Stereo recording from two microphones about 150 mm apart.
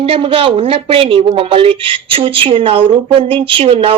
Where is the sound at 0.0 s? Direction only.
35° right (ahead or behind).